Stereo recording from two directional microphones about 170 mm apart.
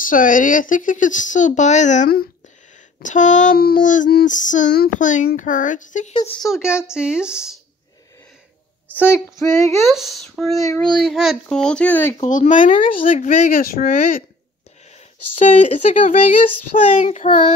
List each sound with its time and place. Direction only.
0.0 s child singing: 50° left (ahead or behind)
6.4 s a woman's voice: 5° right (ahead or behind)
9.1 s a child's voice: 15° left (ahead or behind)
9.8 s a woman's voice: centre (ahead or behind)
10.6 s a child's voice: 20° left (ahead or behind)
11.0 s a woman's voice: centre (ahead or behind)
12.3 s child singing: 50° left (ahead or behind)
15.3 s child singing: 45° left (ahead or behind)